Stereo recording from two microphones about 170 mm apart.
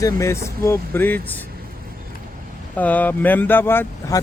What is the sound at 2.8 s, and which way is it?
Speech, 10° left (ahead or behind).